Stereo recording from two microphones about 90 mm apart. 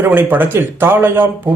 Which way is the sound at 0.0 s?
20° right (ahead or behind).